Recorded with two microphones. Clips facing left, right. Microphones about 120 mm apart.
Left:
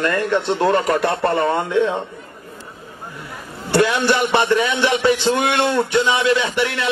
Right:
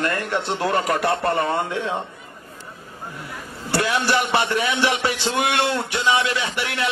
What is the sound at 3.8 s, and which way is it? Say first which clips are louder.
Speech: left 5 dB; 40° left (ahead or behind).